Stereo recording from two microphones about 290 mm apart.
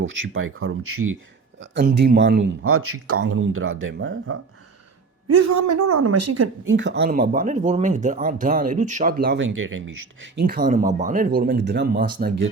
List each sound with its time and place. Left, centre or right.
0.0 s speech: right
1.7 s speech: right
5.3 s a woman's voice: right
6.7 s speech: right
9.6 s speech: right
10.3 s speech: right